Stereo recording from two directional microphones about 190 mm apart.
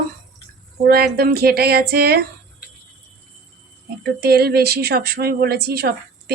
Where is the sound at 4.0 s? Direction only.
60° right (ahead or behind).